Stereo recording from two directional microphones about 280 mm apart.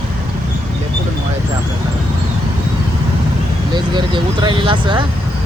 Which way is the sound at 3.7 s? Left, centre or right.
Centre.